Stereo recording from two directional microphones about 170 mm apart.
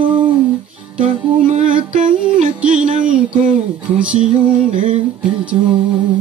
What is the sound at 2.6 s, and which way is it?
Music, 5° right (ahead or behind).